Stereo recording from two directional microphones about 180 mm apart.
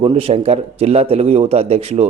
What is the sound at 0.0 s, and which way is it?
A man's voice, 35° right (ahead or behind).